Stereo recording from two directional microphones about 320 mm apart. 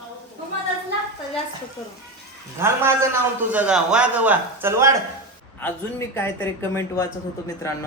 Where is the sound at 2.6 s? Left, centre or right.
Centre.